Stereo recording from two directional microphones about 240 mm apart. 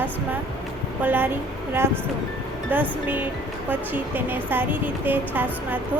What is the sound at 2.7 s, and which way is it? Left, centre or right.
Speech, centre.